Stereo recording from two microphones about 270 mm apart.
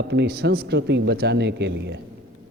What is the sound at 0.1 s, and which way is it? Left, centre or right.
A man's voice, right.